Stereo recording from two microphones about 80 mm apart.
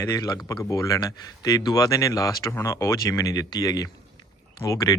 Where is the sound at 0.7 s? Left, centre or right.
Left.